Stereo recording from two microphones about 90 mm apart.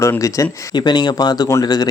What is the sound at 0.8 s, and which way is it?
Speech, 55° left (ahead or behind).